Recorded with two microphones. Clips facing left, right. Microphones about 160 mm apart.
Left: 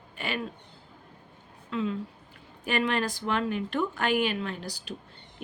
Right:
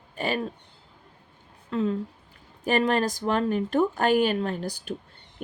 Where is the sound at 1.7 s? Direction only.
40° right (ahead or behind).